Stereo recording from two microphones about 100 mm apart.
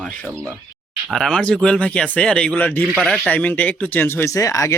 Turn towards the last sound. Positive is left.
turn(degrees=30)  # may be behind; listen again after turning